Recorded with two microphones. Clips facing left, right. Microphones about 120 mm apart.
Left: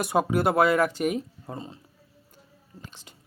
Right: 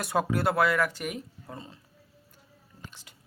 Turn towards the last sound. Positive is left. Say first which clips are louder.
# left 3 dB
turn(degrees=25)  # may be behind; listen again after turning